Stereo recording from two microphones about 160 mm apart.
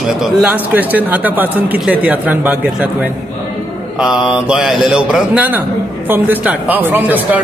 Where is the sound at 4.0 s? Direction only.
5° right (ahead or behind).